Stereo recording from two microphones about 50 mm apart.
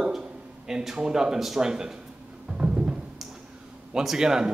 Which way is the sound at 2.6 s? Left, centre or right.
Right.